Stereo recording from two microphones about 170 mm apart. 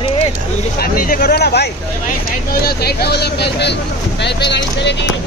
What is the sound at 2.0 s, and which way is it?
Speech, 65° left (ahead or behind).